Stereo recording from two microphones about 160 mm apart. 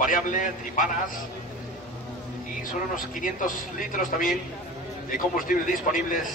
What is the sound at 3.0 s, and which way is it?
A man's voice, 60° left (ahead or behind).